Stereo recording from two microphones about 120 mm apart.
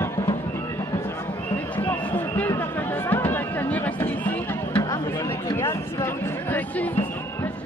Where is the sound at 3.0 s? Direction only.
15° left (ahead or behind).